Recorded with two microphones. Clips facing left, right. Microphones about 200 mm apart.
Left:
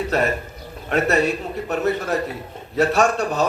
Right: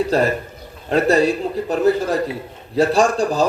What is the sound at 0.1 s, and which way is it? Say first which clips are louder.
A man's voice: right 3 dB; 30° right (ahead or behind).